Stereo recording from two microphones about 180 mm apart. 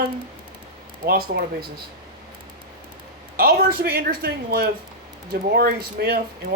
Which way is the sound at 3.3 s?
60° right (ahead or behind).